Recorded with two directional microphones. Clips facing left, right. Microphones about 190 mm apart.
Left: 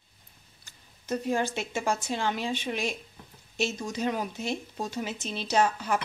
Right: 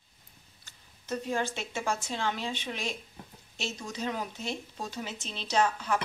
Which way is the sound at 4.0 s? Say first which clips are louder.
Left 4 dB; 15° left (ahead or behind).